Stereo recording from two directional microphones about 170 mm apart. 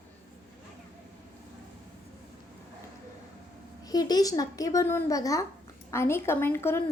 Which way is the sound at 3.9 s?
20° left (ahead or behind).